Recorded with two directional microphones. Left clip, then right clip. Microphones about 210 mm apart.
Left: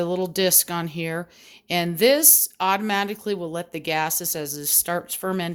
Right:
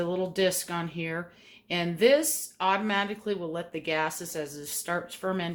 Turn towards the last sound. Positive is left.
turn(degrees=55)  # may be behind; listen again after turning